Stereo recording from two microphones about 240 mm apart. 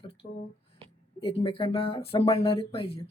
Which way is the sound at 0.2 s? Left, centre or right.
Left.